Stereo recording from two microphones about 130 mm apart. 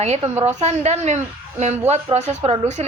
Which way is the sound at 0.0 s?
55° right (ahead or behind).